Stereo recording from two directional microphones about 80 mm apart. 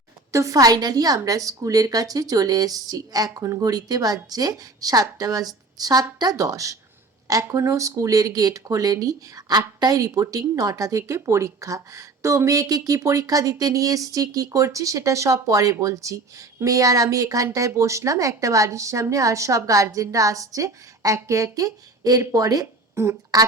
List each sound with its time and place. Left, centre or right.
0.3 s speech: right
23.0 s speech: right
23.3 s speech: right